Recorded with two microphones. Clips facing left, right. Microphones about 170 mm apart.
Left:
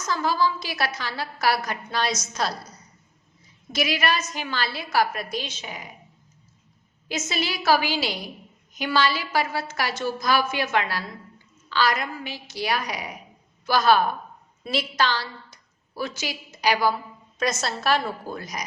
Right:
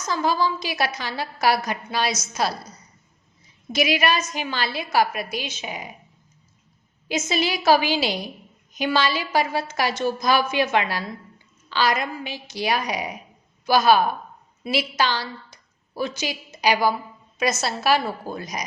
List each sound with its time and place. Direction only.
0.1 s a woman's voice: 15° right (ahead or behind)
7.1 s a woman's voice: 15° right (ahead or behind)